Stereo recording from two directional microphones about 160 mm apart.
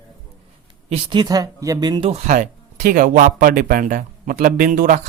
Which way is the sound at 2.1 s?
50° right (ahead or behind).